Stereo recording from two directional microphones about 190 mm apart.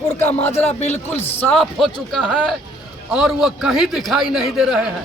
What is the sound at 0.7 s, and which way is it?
Speech, 35° left (ahead or behind).